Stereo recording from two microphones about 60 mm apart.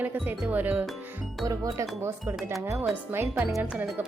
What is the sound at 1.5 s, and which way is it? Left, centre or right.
Speech, right.